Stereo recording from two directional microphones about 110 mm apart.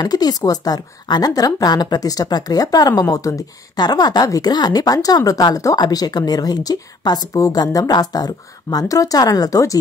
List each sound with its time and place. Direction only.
0.0 s a woman's voice: 35° left (ahead or behind)